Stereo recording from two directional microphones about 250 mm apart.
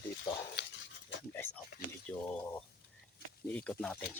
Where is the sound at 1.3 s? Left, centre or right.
Centre.